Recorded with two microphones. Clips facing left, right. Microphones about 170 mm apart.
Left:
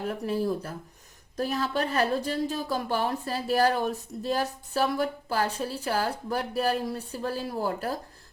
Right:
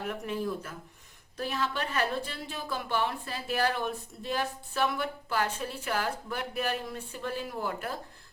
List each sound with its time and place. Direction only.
0.0 s a woman's voice: 35° left (ahead or behind)